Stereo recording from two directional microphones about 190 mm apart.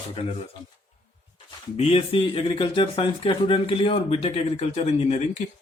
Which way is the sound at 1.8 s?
30° left (ahead or behind).